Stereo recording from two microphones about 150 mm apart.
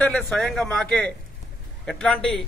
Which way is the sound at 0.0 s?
5° left (ahead or behind).